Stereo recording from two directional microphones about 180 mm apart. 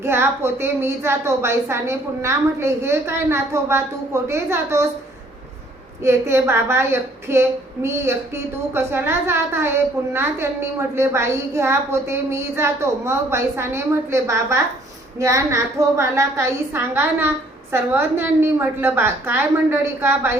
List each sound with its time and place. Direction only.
0.0 s a woman's voice: 15° right (ahead or behind)
6.0 s a woman's voice: 15° right (ahead or behind)